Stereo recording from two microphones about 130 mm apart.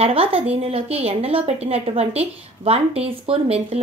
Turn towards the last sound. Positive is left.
turn(degrees=-50)  # may be behind; listen again after turning